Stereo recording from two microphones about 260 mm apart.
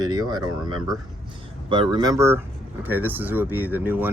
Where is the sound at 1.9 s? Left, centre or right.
Centre.